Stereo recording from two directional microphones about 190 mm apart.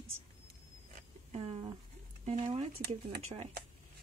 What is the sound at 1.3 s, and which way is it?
Speech, 30° right (ahead or behind).